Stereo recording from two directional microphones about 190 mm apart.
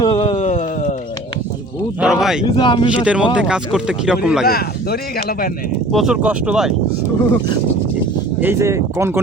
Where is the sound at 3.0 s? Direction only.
5° right (ahead or behind).